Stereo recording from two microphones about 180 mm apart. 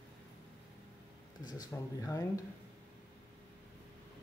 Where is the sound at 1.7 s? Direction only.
10° left (ahead or behind).